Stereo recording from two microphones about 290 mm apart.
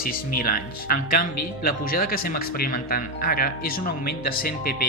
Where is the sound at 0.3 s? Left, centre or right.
Left.